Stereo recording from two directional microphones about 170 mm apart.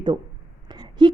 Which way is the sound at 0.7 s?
25° right (ahead or behind).